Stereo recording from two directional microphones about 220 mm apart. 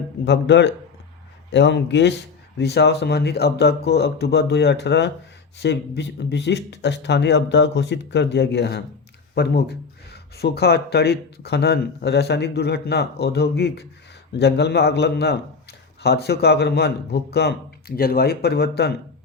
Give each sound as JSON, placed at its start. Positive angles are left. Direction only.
{"t": 0.3, "sound": "speech", "side_deg": 55}